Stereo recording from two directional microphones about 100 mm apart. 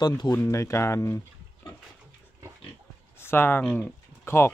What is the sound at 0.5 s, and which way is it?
Speech, 30° left (ahead or behind).